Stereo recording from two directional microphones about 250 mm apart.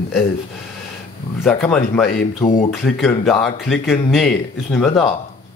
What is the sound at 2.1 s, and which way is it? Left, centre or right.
Speech, left.